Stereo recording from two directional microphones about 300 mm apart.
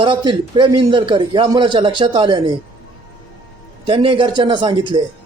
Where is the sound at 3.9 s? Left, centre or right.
Centre.